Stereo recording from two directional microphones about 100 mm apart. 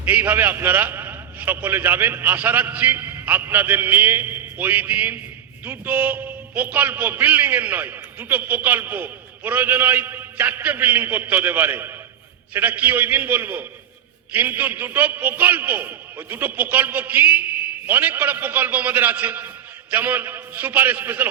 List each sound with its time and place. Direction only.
0.1 s a man's voice: 20° right (ahead or behind)